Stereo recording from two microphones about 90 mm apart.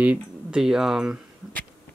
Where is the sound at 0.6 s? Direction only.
5° right (ahead or behind).